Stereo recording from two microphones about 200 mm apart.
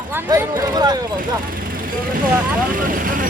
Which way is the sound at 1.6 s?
45° right (ahead or behind).